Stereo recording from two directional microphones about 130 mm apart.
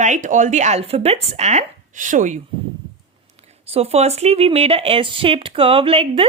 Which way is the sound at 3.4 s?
55° right (ahead or behind).